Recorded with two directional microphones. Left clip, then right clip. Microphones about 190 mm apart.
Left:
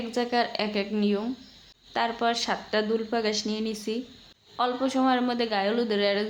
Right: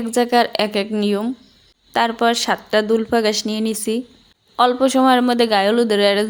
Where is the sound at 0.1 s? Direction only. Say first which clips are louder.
Right 11 dB; 45° right (ahead or behind).